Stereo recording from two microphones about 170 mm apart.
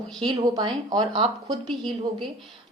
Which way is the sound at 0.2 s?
25° right (ahead or behind).